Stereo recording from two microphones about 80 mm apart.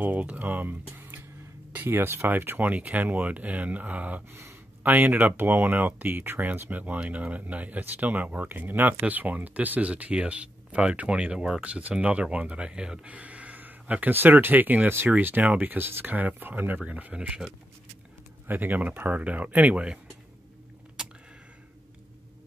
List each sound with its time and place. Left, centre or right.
0.0 s speech: right
4.3 s speech: right
4.8 s speech: right